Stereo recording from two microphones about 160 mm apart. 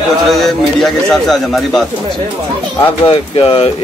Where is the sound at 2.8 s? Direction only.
35° left (ahead or behind).